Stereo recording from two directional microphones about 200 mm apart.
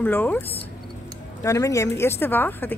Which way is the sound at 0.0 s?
10° left (ahead or behind).